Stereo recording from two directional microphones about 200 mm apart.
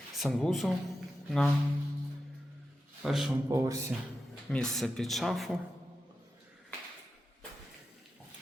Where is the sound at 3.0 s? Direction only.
Centre (ahead or behind).